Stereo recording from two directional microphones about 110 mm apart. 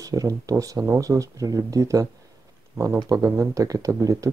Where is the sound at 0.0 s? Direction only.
30° right (ahead or behind).